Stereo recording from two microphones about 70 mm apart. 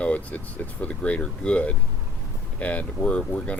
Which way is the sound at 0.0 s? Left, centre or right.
Left.